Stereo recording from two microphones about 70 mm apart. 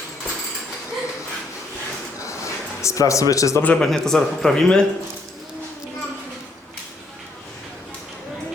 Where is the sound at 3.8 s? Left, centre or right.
Centre.